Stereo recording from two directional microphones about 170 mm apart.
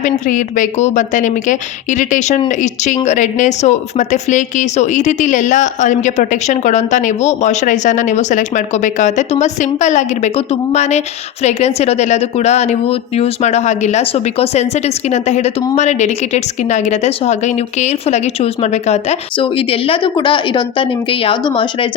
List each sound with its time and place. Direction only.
0.0 s a woman's voice: 50° left (ahead or behind); by 21.8 s 30° left (ahead or behind)